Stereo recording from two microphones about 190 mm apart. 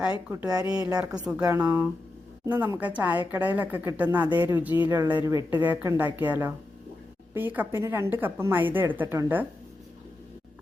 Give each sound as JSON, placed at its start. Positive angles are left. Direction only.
{"t": 0.3, "sound": "a woman's voice", "side_deg": -10}